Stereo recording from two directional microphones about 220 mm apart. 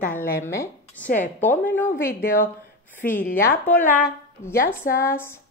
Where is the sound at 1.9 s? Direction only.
40° left (ahead or behind).